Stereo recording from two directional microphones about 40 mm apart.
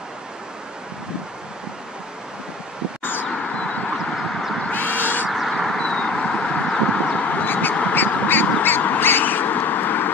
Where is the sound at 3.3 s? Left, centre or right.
Left.